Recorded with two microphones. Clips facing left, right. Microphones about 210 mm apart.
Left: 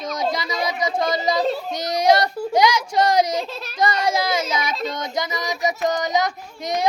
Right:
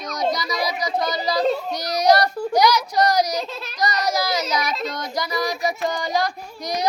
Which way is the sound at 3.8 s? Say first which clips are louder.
Left 2 dB; 25° left (ahead or behind).